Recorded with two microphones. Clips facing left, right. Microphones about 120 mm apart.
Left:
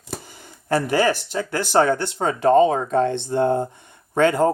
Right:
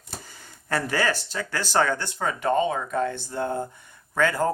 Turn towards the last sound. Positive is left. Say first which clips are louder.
# left 6 dB
turn(degrees=25)  # may be behind; listen again after turning